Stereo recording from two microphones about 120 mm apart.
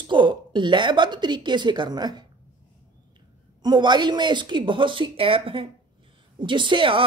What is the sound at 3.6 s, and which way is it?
A woman's voice, 40° right (ahead or behind).